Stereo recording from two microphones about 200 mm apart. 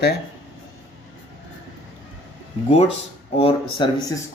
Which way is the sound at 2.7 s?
30° left (ahead or behind).